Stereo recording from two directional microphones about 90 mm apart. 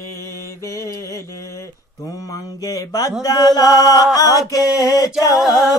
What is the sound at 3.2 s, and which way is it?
Chant, 45° left (ahead or behind).